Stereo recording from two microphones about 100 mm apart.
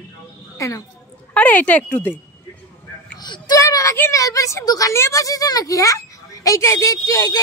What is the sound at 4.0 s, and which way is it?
A child's voice, 30° left (ahead or behind).